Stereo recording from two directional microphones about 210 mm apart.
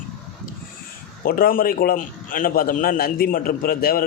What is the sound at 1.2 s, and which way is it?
A man's voice, 45° left (ahead or behind).